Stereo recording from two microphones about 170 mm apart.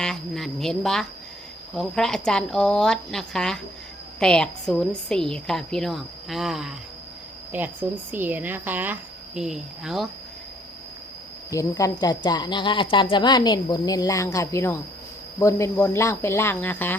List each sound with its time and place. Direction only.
0.0 s a woman's voice: centre (ahead or behind)
11.5 s speech: 20° left (ahead or behind)